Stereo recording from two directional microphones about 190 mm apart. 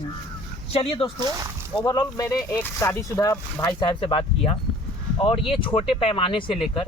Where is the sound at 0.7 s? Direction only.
30° left (ahead or behind).